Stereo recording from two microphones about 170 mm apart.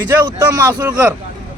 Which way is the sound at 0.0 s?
20° right (ahead or behind).